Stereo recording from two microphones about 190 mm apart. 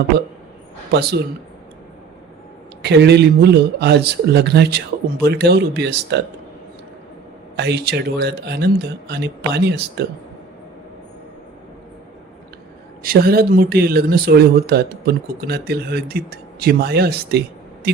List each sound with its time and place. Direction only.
0.9 s speech: 60° right (ahead or behind)
2.8 s speech: 60° right (ahead or behind)
7.5 s speech: 60° right (ahead or behind)
13.0 s speech: 50° right (ahead or behind)